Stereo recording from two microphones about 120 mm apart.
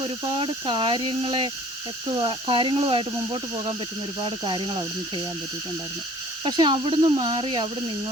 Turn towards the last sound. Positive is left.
turn(degrees=-45)  # may be behind; listen again after turning